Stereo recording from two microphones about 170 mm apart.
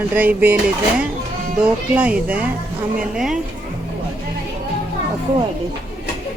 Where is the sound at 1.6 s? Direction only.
5° right (ahead or behind).